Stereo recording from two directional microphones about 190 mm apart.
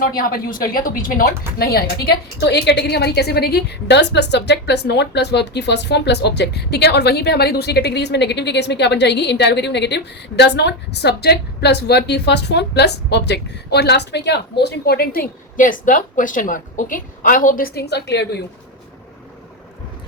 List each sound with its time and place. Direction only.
0.0 s a woman's voice: 45° left (ahead or behind); by 18.3 s 65° left (ahead or behind)